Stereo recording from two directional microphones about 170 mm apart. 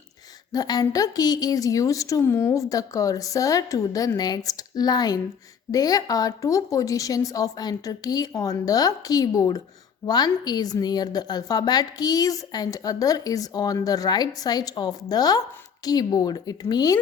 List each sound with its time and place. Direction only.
0.5 s a woman's voice: 25° left (ahead or behind)